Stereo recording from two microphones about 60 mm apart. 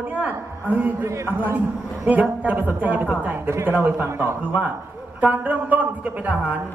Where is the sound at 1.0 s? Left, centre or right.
Right.